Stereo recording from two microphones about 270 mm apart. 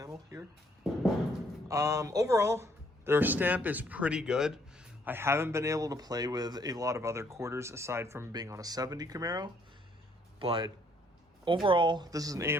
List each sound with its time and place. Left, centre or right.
0.0 s music: centre
1.6 s speech: centre